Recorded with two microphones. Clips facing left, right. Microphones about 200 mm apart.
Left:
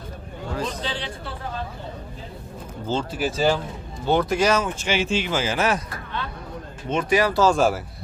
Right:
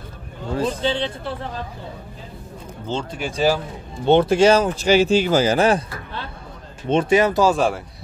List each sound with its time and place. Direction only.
0.6 s a man's voice: 30° right (ahead or behind)
2.9 s speech: 5° left (ahead or behind)
4.0 s speech: 25° right (ahead or behind)
6.9 s a man's voice: 30° right (ahead or behind)
7.4 s speech: centre (ahead or behind)